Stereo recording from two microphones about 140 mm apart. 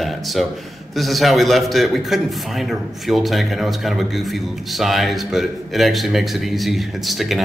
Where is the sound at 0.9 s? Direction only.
Centre (ahead or behind).